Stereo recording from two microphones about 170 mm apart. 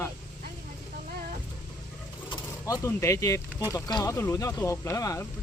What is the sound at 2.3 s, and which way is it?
Speech, 20° left (ahead or behind).